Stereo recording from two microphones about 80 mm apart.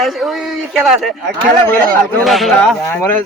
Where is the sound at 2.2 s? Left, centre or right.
Centre.